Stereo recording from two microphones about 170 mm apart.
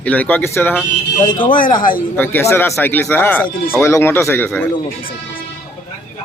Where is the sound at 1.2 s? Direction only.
30° left (ahead or behind).